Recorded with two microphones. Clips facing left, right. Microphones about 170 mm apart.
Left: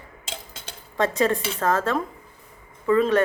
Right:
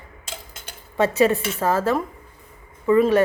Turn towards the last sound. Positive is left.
turn(degrees=-10)  # may be behind; listen again after turning